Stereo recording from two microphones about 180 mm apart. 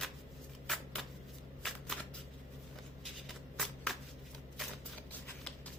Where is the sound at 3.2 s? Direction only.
Centre (ahead or behind).